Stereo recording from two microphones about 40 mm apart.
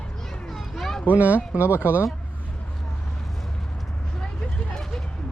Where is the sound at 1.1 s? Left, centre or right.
Right.